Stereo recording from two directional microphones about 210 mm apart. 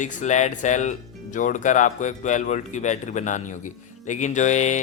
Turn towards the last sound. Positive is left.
turn(degrees=35)  # may be behind; listen again after turning